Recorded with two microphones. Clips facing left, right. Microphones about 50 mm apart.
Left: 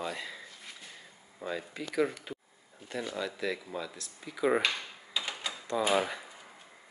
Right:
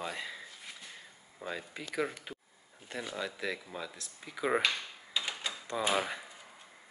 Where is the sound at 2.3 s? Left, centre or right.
Centre.